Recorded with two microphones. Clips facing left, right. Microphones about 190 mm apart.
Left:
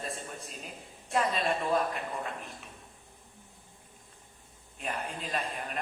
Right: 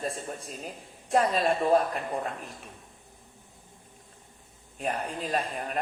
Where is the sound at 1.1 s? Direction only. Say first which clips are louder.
Right 5 dB; 45° right (ahead or behind).